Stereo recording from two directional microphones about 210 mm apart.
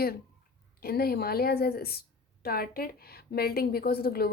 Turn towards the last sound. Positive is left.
turn(degrees=45)  # may be behind; listen again after turning